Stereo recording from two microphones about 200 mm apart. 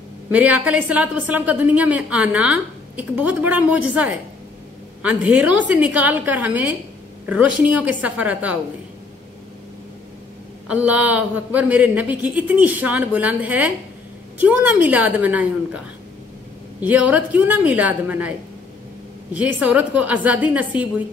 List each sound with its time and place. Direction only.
0.3 s a woman's voice: 10° right (ahead or behind)
10.7 s a woman's voice: 5° right (ahead or behind)
16.8 s a woman's voice: 10° right (ahead or behind)
19.3 s a woman's voice: 5° right (ahead or behind)